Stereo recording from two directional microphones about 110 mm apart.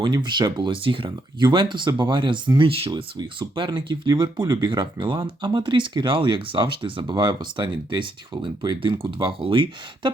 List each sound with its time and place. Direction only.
0.0 s speech: 45° right (ahead or behind)
2.9 s speech: 40° right (ahead or behind)